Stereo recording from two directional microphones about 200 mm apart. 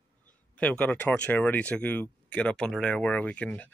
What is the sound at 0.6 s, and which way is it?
Speech, 10° left (ahead or behind).